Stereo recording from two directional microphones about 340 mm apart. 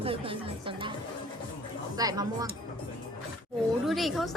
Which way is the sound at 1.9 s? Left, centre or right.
Centre.